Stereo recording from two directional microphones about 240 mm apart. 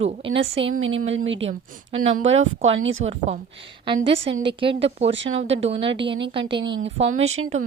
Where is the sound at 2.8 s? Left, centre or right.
Right.